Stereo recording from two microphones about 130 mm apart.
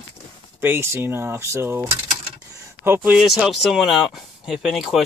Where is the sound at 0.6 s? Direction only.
15° right (ahead or behind).